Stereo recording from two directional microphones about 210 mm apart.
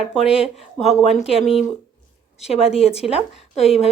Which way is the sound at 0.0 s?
5° right (ahead or behind).